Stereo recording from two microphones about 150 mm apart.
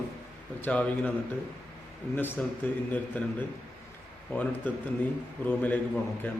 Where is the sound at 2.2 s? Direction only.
10° left (ahead or behind).